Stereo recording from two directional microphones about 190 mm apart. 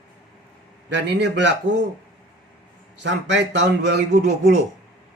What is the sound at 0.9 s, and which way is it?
Speech, 65° right (ahead or behind).